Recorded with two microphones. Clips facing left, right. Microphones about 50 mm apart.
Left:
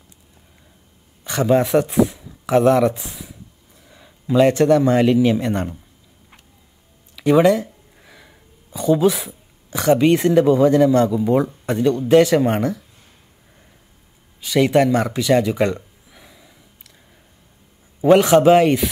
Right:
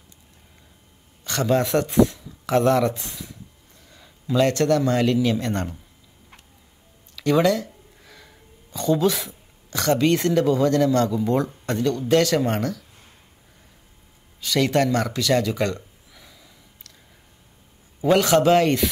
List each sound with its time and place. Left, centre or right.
1.2 s a man's voice: centre
7.2 s speech: centre
14.4 s a sound: centre
18.0 s speech: centre